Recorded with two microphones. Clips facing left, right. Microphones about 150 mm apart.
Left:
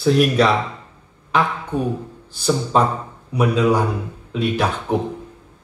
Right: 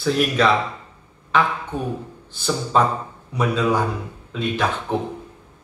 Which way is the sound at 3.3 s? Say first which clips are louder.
Left 3 dB; 10° left (ahead or behind).